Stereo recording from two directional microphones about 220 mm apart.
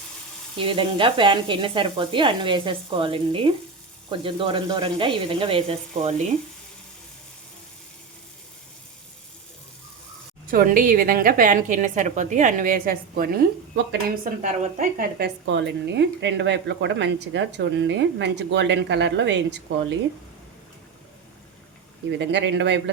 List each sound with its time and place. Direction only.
0.6 s speech: 25° right (ahead or behind)
10.5 s a woman's voice: 40° right (ahead or behind)
14.4 s a woman's voice: 35° right (ahead or behind); by 19.5 s 50° right (ahead or behind)
22.2 s a woman's voice: 50° right (ahead or behind)